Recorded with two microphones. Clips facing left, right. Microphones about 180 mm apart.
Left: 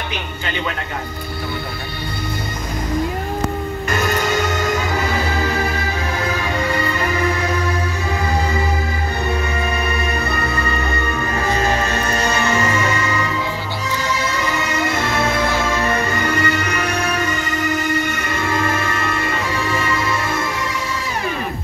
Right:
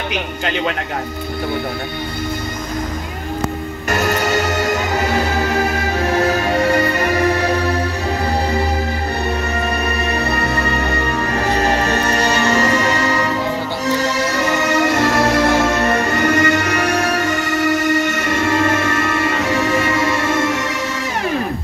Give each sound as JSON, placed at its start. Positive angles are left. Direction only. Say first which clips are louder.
{"t": 3.9, "sound": "music", "louder": "right 3 dB", "side_deg": -70}
{"t": 6.2, "sound": "music", "louder": "right 5 dB", "side_deg": -45}
{"t": 6.5, "sound": "music", "louder": "right 5 dB", "side_deg": -60}
{"t": 10.5, "sound": "music", "louder": "right 3 dB", "side_deg": -70}
{"t": 11.1, "sound": "music", "louder": "right 1 dB", "side_deg": -40}
{"t": 12.0, "sound": "music", "louder": "right 3 dB", "side_deg": -70}
{"t": 12.4, "sound": "music", "louder": "right 3 dB", "side_deg": -40}
{"t": 16.3, "sound": "music", "louder": "right 4 dB", "side_deg": -75}
{"t": 18.6, "sound": "music", "louder": "right 4 dB", "side_deg": -50}
{"t": 20.1, "sound": "music", "louder": "right 4 dB", "side_deg": -80}